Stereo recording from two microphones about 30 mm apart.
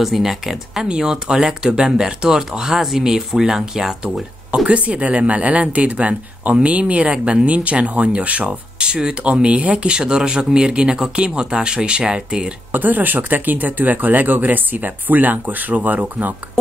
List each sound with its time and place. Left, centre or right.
0.0 s speech: centre
0.8 s speech: right
1.1 s speech: centre
4.6 s a man's voice: right
8.7 s speech: right
9.4 s a man's voice: right
9.9 s speech: right
12.7 s speech: right